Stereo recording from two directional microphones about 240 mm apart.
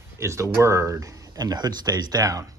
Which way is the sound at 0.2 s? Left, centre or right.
Centre.